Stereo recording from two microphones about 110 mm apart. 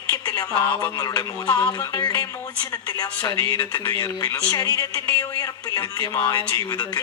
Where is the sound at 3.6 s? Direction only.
40° left (ahead or behind).